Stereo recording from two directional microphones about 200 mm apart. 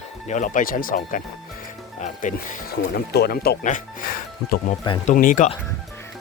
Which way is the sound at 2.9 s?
50° left (ahead or behind).